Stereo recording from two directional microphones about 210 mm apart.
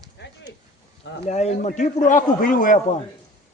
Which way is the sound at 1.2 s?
30° left (ahead or behind).